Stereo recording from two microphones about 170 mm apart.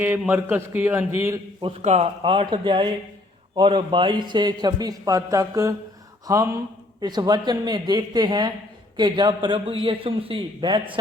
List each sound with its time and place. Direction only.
0.0 s a man's voice: 10° right (ahead or behind)
1.6 s a man's voice: 40° right (ahead or behind)